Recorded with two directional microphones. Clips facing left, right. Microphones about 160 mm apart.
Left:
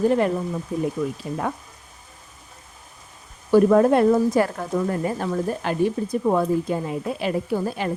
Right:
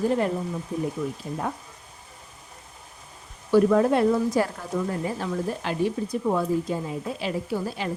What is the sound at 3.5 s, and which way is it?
Speech, 45° left (ahead or behind).